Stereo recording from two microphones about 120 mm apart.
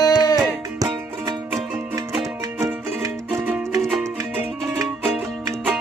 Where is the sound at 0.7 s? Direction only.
30° right (ahead or behind).